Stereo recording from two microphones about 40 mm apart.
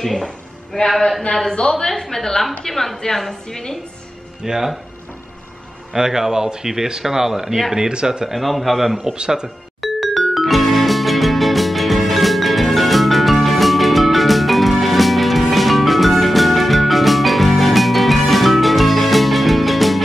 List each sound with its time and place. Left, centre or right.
0.0 s a woman's voice: centre
1.3 s a woman's voice: centre
4.4 s speech: centre
5.9 s speech: centre
8.3 s a man's voice: centre
9.1 s speech: right
9.8 s music: centre